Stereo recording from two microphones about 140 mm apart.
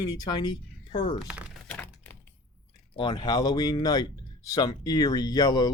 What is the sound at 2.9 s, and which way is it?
Speech, 35° left (ahead or behind).